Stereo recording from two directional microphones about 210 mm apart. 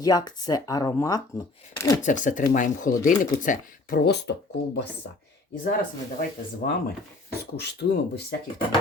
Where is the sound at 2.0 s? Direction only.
35° left (ahead or behind).